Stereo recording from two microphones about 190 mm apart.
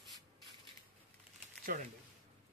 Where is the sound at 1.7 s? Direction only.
45° right (ahead or behind).